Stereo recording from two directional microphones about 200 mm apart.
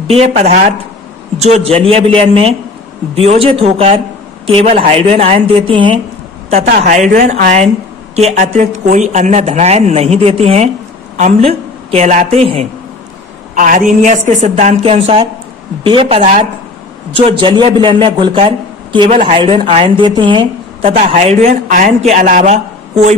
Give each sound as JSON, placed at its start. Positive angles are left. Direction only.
{"t": 0.0, "sound": "a man's voice", "side_deg": -30}
{"t": 6.5, "sound": "a woman's voice", "side_deg": -40}
{"t": 13.6, "sound": "a man's voice", "side_deg": -40}